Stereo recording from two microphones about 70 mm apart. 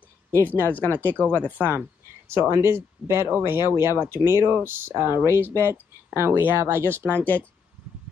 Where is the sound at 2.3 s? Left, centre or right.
Right.